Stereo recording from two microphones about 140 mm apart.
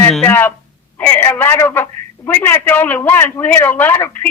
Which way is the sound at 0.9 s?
10° left (ahead or behind).